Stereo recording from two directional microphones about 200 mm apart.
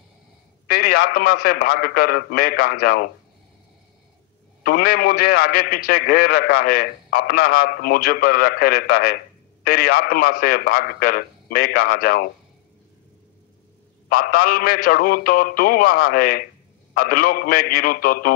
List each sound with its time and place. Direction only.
0.7 s a man's voice: 50° left (ahead or behind)
4.6 s a man's voice: 50° left (ahead or behind)
14.0 s a man's voice: 50° left (ahead or behind)